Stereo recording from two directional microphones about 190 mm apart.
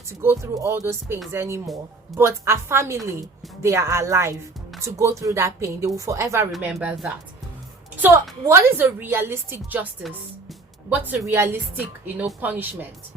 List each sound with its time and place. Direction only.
0.1 s a woman's voice: 15° right (ahead or behind)
6.5 s a woman's voice: 5° right (ahead or behind)